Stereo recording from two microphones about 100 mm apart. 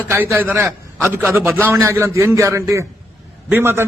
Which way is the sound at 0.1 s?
25° right (ahead or behind).